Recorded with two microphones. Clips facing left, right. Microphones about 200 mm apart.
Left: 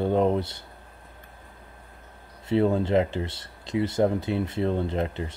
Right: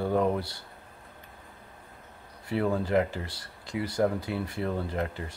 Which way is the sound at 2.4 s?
25° left (ahead or behind).